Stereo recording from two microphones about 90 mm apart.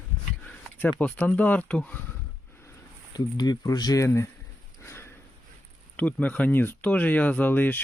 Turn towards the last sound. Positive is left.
turn(degrees=20)  # may be behind; listen again after turning